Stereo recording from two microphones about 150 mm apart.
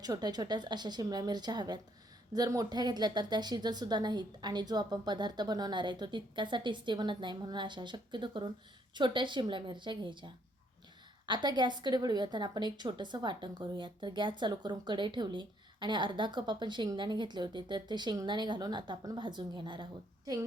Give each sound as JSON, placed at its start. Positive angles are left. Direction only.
{"t": 0.0, "sound": "a woman's voice", "side_deg": -25}